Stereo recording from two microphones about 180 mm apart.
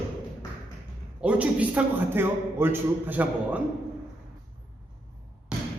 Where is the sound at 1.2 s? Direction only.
5° right (ahead or behind).